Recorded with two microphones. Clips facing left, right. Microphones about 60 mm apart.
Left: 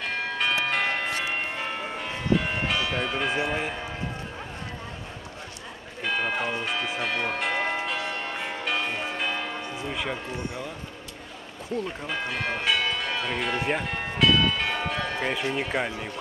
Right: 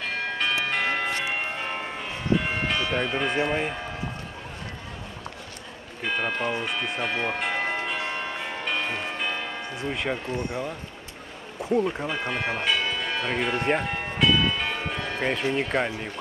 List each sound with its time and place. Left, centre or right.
0.0 s church bell: centre
2.7 s church bell: centre
3.2 s speech: centre
6.0 s speech: centre
8.4 s church bell: centre
9.8 s speech: centre
11.7 s speech: centre
12.1 s speech: centre
12.6 s church bell: centre